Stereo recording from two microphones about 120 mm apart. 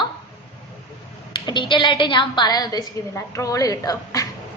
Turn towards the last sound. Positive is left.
turn(degrees=30)  # may be behind; listen again after turning